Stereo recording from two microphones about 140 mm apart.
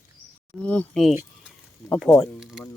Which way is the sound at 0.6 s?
10° left (ahead or behind).